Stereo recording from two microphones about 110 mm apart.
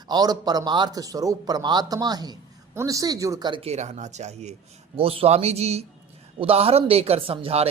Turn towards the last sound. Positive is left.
turn(degrees=-65)  # may be behind; listen again after turning